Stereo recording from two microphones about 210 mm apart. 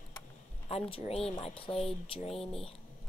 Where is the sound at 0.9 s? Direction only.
30° left (ahead or behind).